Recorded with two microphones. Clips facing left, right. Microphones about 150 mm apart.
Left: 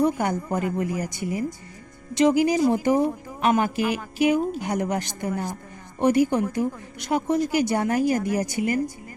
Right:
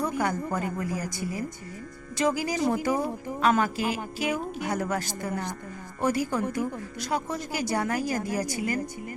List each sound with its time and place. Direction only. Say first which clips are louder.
0.0 s a woman's voice: left 5 dB; 20° left (ahead or behind)